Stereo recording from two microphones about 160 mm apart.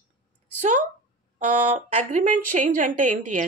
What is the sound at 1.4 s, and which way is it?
Speech, 50° right (ahead or behind).